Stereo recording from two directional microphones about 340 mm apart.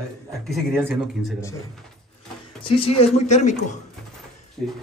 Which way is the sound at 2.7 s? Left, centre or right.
Centre.